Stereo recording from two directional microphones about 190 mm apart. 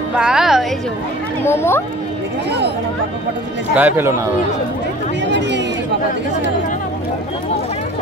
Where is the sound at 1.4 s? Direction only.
15° left (ahead or behind).